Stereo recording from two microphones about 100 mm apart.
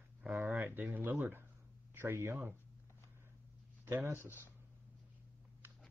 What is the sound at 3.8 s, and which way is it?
Speech, 25° right (ahead or behind).